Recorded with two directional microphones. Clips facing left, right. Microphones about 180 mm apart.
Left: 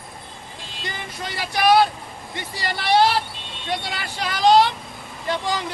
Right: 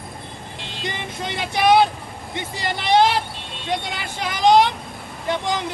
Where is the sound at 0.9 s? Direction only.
20° right (ahead or behind).